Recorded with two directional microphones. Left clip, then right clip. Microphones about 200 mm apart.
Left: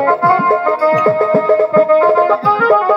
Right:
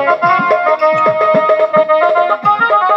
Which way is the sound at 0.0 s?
40° left (ahead or behind).